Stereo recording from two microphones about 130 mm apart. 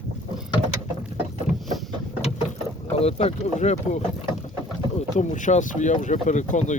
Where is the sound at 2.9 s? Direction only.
55° left (ahead or behind).